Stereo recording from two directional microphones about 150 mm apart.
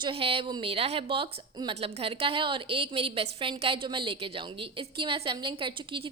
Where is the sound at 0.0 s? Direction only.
35° right (ahead or behind).